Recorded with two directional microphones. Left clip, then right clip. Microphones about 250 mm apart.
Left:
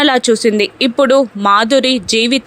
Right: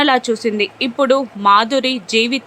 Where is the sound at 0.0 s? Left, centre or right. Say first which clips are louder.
Left 4 dB; centre.